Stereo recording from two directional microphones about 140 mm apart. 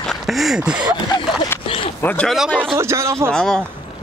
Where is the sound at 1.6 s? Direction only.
40° left (ahead or behind).